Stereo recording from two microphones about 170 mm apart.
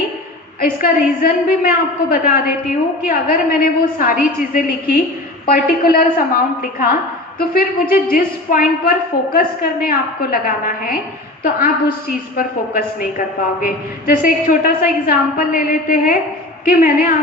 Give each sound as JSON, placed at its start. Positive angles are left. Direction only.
{"t": 0.6, "sound": "a woman's voice", "side_deg": 55}
{"t": 12.4, "sound": "a woman's voice", "side_deg": 55}